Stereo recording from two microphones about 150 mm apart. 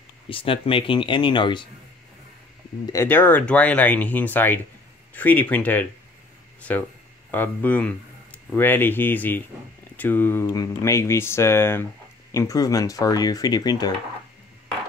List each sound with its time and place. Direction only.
0.3 s speech: 35° left (ahead or behind)
2.9 s speech: 15° left (ahead or behind)